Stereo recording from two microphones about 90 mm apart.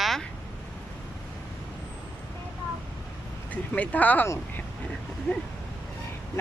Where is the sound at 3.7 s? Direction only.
15° left (ahead or behind).